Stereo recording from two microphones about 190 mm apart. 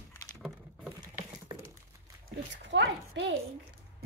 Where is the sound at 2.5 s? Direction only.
70° right (ahead or behind).